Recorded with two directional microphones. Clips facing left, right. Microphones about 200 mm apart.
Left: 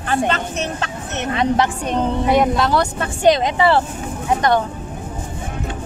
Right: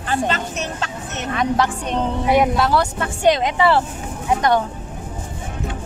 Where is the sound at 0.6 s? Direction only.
60° left (ahead or behind).